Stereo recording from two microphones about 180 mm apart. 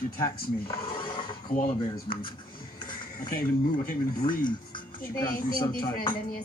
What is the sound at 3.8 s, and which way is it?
Speech, 50° left (ahead or behind).